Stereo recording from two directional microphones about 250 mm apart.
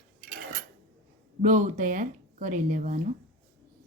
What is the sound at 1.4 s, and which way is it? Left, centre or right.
Speech, right.